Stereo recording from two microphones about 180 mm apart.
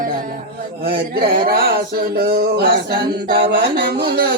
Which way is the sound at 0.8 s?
55° right (ahead or behind).